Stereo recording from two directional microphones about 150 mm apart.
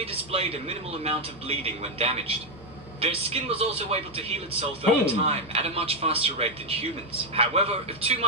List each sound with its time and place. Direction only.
0.0 s a man's voice: 40° right (ahead or behind)